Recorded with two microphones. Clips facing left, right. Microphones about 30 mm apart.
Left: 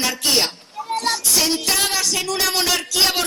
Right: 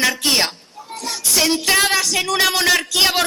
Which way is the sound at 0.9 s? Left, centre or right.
Left.